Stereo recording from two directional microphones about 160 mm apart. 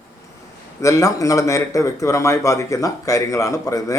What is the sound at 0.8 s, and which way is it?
Speech, 20° left (ahead or behind).